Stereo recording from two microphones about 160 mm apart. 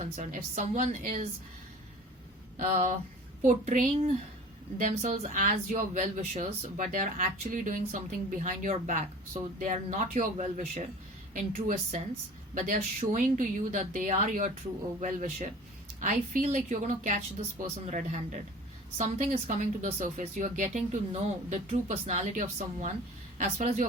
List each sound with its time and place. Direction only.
0.0 s speech: 50° right (ahead or behind)
2.6 s a woman's voice: 50° right (ahead or behind)